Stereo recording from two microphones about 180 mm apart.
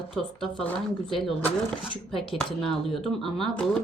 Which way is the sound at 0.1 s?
Centre (ahead or behind).